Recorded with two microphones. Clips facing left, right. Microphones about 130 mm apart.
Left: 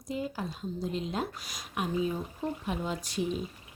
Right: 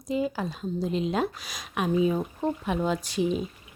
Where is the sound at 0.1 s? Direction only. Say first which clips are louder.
Right 7 dB; 90° right.